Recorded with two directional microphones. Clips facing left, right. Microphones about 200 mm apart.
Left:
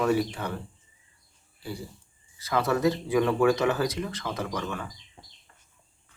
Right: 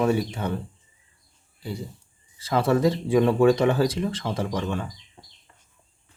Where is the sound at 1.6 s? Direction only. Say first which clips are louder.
Right 3 dB; 20° right (ahead or behind).